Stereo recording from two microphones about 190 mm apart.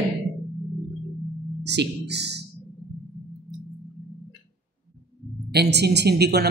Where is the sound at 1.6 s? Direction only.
65° right (ahead or behind).